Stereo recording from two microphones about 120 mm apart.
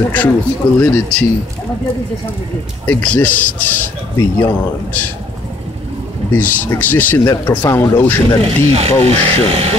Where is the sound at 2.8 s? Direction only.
10° left (ahead or behind).